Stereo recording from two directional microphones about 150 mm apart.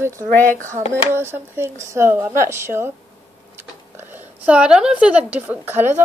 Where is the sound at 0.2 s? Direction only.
10° left (ahead or behind).